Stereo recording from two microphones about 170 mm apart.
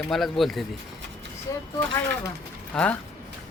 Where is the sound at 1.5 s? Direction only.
15° left (ahead or behind).